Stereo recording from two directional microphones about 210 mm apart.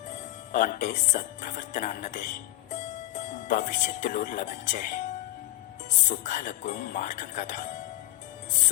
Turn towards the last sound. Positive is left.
turn(degrees=35)  # may be behind; listen again after turning